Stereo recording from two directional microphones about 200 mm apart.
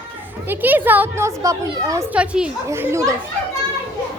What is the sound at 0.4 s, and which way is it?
A woman's voice, 10° right (ahead or behind).